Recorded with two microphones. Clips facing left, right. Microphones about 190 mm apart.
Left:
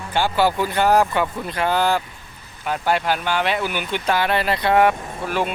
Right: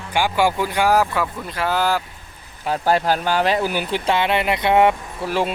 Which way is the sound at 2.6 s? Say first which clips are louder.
Right 2 dB; 35° right (ahead or behind).